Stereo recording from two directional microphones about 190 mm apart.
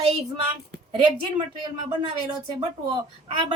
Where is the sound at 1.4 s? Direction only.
35° right (ahead or behind).